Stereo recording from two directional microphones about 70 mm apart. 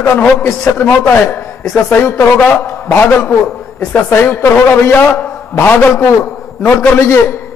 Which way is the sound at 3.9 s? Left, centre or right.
Left.